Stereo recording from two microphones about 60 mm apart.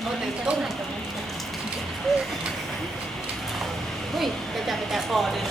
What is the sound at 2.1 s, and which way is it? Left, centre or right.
Speech, centre.